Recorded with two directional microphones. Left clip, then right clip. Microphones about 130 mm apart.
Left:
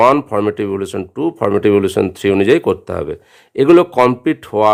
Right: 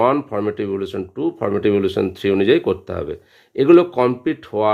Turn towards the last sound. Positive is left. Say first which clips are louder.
# left 6 dB
turn(degrees=50)  # may be behind; listen again after turning